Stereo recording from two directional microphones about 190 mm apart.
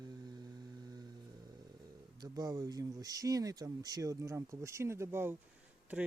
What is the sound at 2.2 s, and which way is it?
Speech, 20° right (ahead or behind).